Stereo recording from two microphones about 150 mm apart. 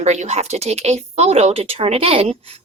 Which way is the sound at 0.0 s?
50° right (ahead or behind).